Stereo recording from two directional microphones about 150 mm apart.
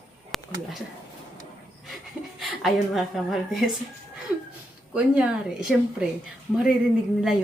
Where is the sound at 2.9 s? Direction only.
Centre (ahead or behind).